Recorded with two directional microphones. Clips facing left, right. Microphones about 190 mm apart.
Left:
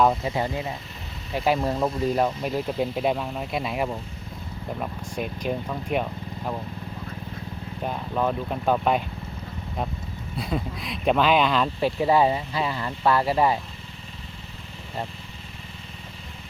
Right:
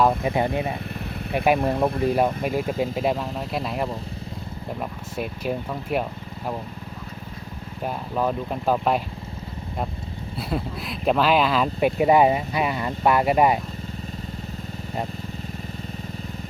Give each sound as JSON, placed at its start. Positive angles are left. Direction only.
{"t": 0.1, "sound": "speech", "side_deg": -55}
{"t": 1.7, "sound": "speech", "side_deg": -55}
{"t": 2.1, "sound": "speech", "side_deg": -10}
{"t": 7.8, "sound": "speech", "side_deg": -5}
{"t": 10.3, "sound": "speech", "side_deg": -5}
{"t": 11.8, "sound": "speech", "side_deg": -15}